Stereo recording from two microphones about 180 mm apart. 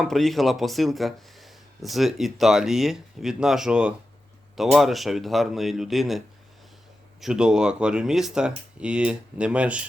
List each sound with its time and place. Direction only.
0.0 s speech: centre (ahead or behind)